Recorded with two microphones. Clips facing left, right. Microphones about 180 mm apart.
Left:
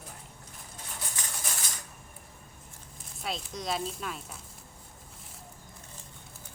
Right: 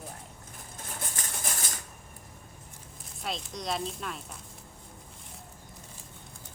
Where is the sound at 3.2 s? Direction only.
Centre (ahead or behind).